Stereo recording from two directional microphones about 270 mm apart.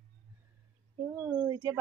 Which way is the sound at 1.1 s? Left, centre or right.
Centre.